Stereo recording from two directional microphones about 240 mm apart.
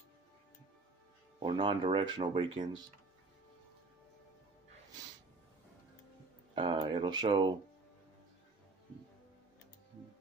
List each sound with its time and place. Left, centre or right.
1.4 s speech: right
6.5 s speech: right